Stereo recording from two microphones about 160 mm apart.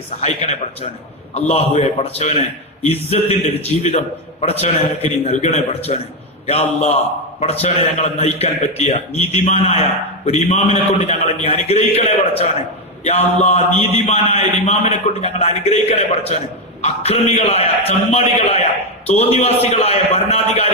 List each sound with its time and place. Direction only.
1.3 s a man's voice: 40° left (ahead or behind)